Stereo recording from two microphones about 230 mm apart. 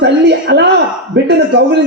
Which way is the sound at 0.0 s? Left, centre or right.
Right.